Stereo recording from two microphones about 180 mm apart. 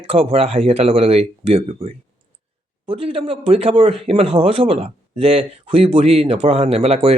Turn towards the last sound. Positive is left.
turn(degrees=-35)  # may be behind; listen again after turning